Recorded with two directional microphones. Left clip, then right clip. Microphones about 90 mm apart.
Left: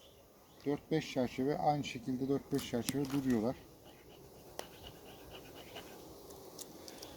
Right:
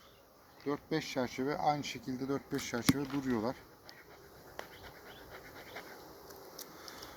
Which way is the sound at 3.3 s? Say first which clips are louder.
Right 1 dB; 25° left (ahead or behind).